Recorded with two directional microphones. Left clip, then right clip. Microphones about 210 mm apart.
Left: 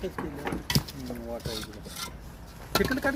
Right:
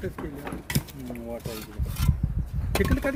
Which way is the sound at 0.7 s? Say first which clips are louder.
Left 3 dB; 45° right (ahead or behind).